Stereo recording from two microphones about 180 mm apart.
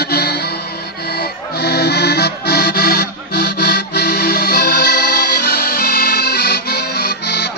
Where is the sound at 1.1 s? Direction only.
60° left (ahead or behind).